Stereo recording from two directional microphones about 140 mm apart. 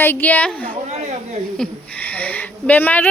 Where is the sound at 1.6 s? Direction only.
10° left (ahead or behind).